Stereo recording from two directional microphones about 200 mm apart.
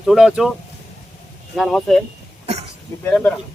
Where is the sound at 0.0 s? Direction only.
5° right (ahead or behind).